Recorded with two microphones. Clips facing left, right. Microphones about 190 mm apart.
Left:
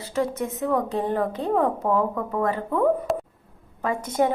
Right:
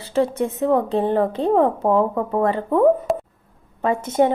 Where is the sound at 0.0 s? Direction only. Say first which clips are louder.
Right 5 dB; 30° right (ahead or behind).